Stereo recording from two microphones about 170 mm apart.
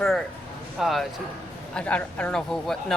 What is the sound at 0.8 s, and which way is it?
Speech, centre (ahead or behind).